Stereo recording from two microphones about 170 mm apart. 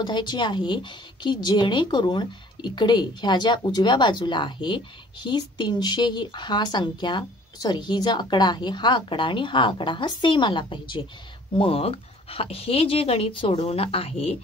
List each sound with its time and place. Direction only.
0.0 s a woman's voice: 25° left (ahead or behind)